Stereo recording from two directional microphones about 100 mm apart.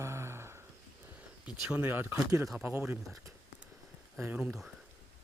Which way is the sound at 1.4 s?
10° right (ahead or behind).